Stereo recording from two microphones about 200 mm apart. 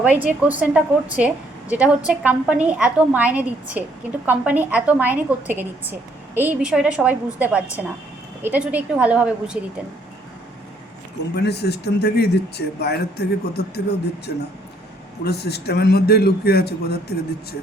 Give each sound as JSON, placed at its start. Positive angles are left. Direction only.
{"t": 0.0, "sound": "a woman's voice", "side_deg": -10}
{"t": 11.3, "sound": "a man's voice", "side_deg": 55}